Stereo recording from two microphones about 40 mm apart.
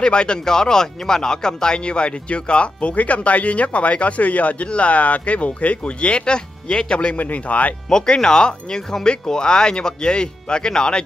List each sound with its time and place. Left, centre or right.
0.0 s speech: left
7.2 s speech: left
7.9 s speech: centre